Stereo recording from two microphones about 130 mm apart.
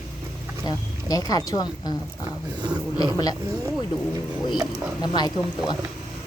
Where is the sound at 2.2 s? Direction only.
35° right (ahead or behind).